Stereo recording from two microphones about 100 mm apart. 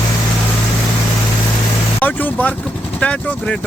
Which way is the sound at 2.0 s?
15° left (ahead or behind).